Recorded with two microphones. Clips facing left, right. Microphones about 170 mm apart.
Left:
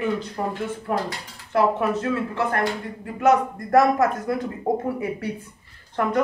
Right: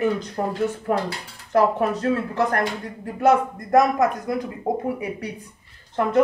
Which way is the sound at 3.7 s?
15° right (ahead or behind).